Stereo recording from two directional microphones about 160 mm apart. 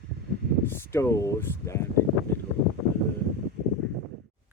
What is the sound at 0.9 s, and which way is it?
Speech, 15° left (ahead or behind).